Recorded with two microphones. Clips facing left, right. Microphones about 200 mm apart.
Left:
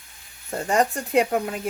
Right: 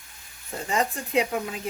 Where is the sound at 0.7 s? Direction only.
45° left (ahead or behind).